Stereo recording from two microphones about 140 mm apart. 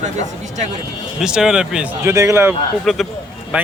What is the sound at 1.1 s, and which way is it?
Speech, 5° right (ahead or behind).